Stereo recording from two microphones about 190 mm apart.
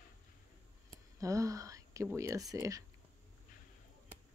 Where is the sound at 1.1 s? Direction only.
15° right (ahead or behind).